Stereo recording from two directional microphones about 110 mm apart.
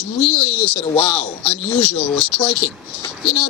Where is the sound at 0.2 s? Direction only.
65° left (ahead or behind).